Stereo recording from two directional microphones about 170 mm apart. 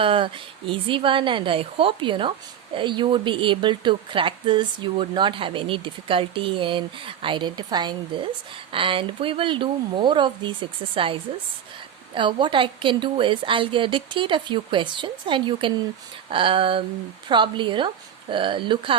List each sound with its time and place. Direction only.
0.0 s a woman's voice: 30° right (ahead or behind)